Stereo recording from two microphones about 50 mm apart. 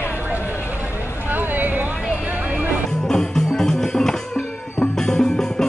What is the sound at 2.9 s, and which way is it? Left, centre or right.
Music, centre.